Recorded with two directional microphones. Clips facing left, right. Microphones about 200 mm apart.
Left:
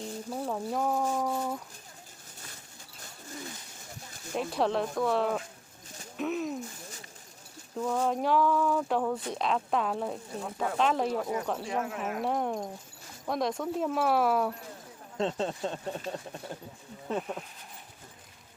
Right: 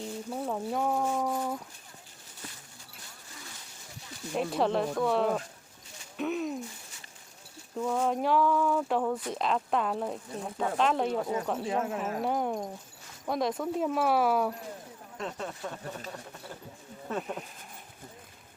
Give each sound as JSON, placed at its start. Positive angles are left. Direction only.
{"t": 0.0, "sound": "speech", "side_deg": 0}
{"t": 4.4, "sound": "speech", "side_deg": 0}
{"t": 6.1, "sound": "a sound", "side_deg": 0}
{"t": 7.8, "sound": "speech", "side_deg": 0}
{"t": 11.1, "sound": "speech", "side_deg": -25}
{"t": 11.4, "sound": "speech", "side_deg": 0}
{"t": 11.9, "sound": "speech", "side_deg": -30}
{"t": 12.2, "sound": "speech", "side_deg": 0}
{"t": 15.2, "sound": "speech", "side_deg": 25}
{"t": 17.2, "sound": "speech", "side_deg": 0}